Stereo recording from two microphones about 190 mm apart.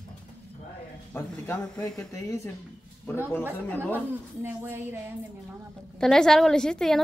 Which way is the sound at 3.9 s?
10° right (ahead or behind).